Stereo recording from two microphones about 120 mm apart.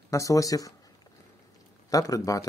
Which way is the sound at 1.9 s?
30° left (ahead or behind).